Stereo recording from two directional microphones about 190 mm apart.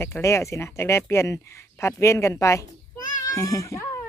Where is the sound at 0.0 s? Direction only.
15° left (ahead or behind).